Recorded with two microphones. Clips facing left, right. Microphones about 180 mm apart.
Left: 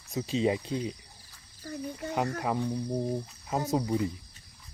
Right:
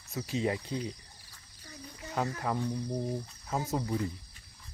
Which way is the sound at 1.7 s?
55° left (ahead or behind).